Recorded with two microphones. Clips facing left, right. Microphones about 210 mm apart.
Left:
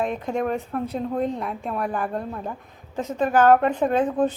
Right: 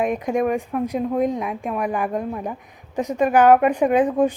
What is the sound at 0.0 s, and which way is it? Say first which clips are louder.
Speech: right 4 dB; 15° right (ahead or behind).